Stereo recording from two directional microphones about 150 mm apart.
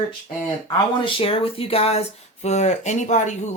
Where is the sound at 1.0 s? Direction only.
40° left (ahead or behind).